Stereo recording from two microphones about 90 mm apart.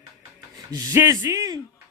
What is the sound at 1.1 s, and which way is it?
Speech, 45° right (ahead or behind).